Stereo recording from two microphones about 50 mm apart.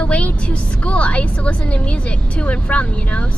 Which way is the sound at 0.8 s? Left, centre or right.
Left.